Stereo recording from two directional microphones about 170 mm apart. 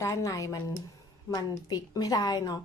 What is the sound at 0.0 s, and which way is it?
A woman's voice, 20° left (ahead or behind).